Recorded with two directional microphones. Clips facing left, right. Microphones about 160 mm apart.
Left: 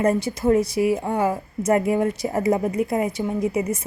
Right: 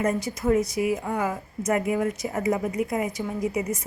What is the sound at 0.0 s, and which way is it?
A woman's voice, 30° left (ahead or behind).